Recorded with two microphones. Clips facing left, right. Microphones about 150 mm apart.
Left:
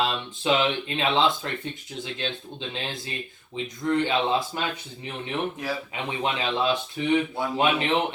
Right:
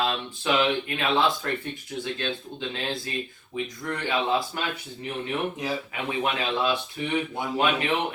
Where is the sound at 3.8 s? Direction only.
25° left (ahead or behind).